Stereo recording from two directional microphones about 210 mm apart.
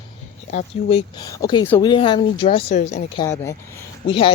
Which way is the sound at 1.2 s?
15° left (ahead or behind).